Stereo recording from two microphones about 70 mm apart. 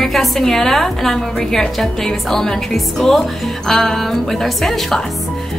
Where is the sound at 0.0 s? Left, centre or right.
Centre.